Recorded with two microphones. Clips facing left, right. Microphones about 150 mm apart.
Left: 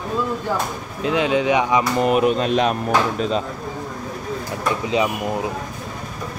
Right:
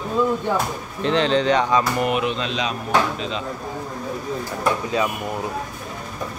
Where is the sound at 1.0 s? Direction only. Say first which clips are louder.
Even; 10° left (ahead or behind).